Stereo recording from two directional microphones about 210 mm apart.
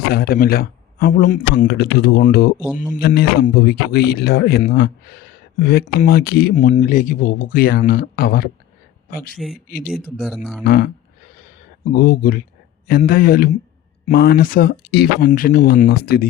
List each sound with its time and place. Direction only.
0.1 s speech: 45° left (ahead or behind)
1.6 s speech: 50° left (ahead or behind)
9.3 s speech: centre (ahead or behind)
9.6 s speech: 45° left (ahead or behind)
10.2 s speech: centre (ahead or behind)
10.6 s speech: 50° left (ahead or behind)
11.9 s speech: 45° left (ahead or behind)